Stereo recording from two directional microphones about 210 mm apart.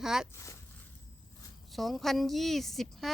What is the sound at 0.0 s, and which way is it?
Speech, 5° right (ahead or behind).